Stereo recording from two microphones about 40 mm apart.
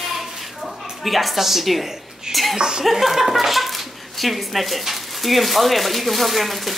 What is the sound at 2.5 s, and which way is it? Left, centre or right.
Speech, centre.